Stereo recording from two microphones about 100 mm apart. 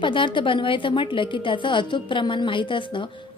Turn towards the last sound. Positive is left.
turn(degrees=55)  # may be behind; listen again after turning